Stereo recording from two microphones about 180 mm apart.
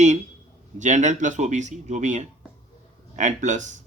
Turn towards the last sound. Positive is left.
turn(degrees=-40)  # may be behind; listen again after turning